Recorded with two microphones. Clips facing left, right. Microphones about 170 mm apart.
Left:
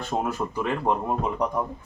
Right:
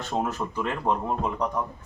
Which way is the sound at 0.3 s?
10° left (ahead or behind).